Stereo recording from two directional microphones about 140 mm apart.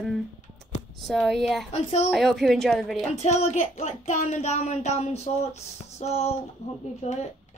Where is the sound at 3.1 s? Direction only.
50° left (ahead or behind).